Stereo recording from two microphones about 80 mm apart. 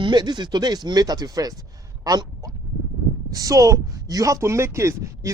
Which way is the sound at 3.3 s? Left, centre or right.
Right.